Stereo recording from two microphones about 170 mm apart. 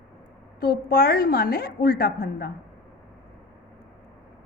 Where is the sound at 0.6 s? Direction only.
60° left (ahead or behind).